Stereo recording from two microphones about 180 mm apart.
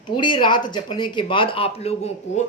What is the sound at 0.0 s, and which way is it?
A woman's voice, 25° left (ahead or behind).